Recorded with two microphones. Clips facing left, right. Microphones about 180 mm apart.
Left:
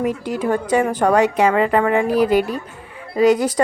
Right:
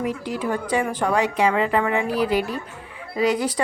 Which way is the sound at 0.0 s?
50° left (ahead or behind).